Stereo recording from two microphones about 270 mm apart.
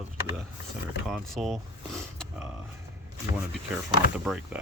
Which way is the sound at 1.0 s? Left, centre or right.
Centre.